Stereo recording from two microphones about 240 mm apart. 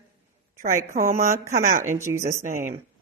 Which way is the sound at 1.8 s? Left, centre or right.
Centre.